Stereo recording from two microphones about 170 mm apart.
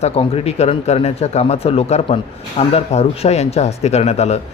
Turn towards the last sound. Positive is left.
turn(degrees=40)  # may be behind; listen again after turning